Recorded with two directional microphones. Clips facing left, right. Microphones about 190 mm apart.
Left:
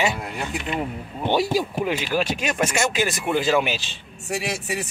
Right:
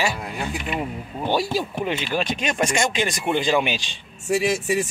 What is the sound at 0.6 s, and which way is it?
Speech, 10° right (ahead or behind).